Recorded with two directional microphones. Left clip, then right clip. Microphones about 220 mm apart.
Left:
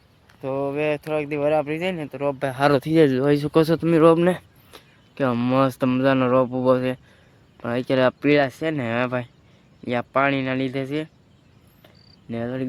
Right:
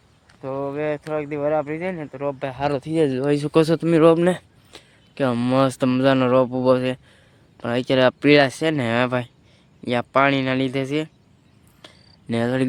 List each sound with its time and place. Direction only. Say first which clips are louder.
0.4 s speech: left 1 dB; 10° left (ahead or behind)
2.6 s speech: left 6 dB; 45° left (ahead or behind)
2.8 s speech: left 3 dB; 15° left (ahead or behind); by 11.1 s 15° right (ahead or behind)
12.3 s speech: right 6 dB; 25° right (ahead or behind)